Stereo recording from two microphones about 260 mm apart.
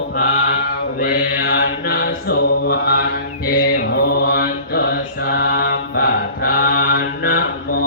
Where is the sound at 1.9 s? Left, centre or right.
Left.